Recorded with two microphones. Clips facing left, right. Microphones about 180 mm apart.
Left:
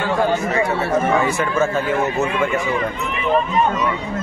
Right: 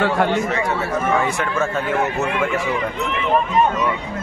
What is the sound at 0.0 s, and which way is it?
Speech, 70° right (ahead or behind).